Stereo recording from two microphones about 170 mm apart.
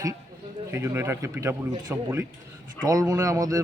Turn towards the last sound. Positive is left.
turn(degrees=-20)  # may be behind; listen again after turning